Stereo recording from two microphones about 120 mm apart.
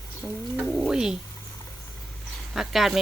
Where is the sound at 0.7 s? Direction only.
5° right (ahead or behind).